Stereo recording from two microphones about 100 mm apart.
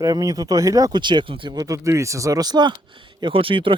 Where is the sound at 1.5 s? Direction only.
35° right (ahead or behind).